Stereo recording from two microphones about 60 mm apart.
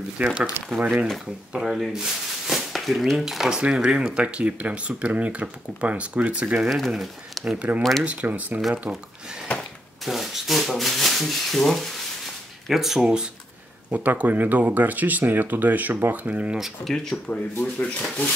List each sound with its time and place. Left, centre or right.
0.2 s speech: centre
1.6 s speech: centre
6.8 s speech: centre
7.5 s speech: right
8.9 s speech: centre
10.0 s speech: centre
13.8 s speech: right
16.8 s speech: centre
17.6 s speech: left